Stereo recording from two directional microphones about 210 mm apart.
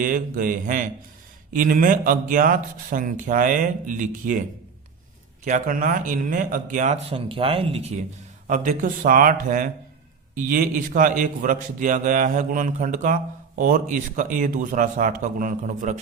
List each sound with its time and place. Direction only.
0.0 s a man's voice: 40° right (ahead or behind)
5.5 s a man's voice: 40° right (ahead or behind)